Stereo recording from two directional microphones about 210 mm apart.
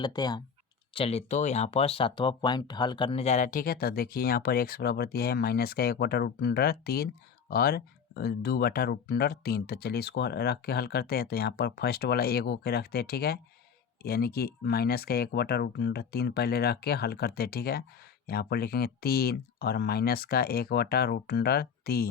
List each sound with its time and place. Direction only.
0.0 s speech: 20° left (ahead or behind); by 22.1 s 45° left (ahead or behind)